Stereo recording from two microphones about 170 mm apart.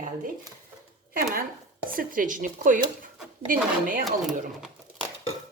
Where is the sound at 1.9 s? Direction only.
55° right (ahead or behind).